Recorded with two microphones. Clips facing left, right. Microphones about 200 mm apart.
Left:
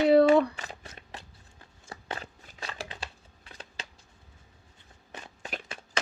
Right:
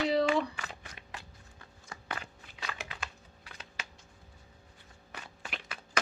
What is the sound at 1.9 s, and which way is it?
Walk, 30° left (ahead or behind).